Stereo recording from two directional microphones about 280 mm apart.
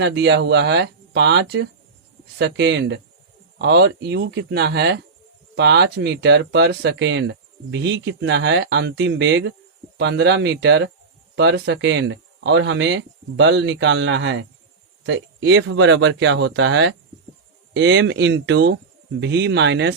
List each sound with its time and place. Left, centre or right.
0.0 s speech: right